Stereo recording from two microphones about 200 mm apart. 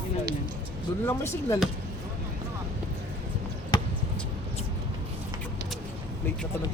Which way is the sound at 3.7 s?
25° left (ahead or behind).